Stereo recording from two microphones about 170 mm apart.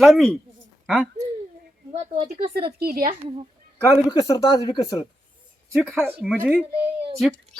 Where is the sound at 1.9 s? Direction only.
40° right (ahead or behind).